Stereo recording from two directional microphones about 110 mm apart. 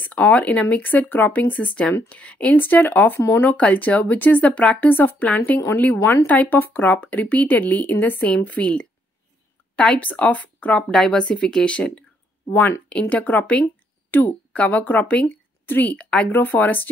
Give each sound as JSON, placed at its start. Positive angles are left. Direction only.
{"t": 0.0, "sound": "speech", "side_deg": 15}